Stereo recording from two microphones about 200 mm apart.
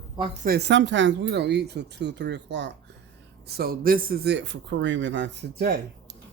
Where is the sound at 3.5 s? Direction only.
50° right (ahead or behind).